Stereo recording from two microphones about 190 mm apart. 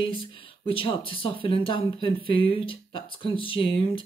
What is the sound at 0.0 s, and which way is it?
Speech, 25° left (ahead or behind).